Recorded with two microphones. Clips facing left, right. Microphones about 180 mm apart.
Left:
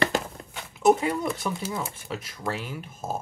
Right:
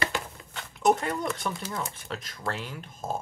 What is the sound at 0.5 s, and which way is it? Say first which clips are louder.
Speech: left 3 dB; 10° left (ahead or behind).